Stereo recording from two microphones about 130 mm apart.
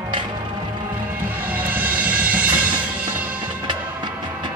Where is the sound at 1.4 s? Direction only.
15° right (ahead or behind).